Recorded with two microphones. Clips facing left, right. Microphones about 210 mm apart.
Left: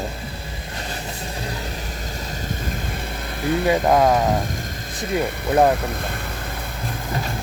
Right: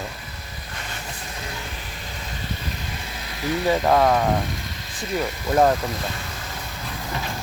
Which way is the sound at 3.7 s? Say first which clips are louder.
Left 1 dB; 15° left (ahead or behind).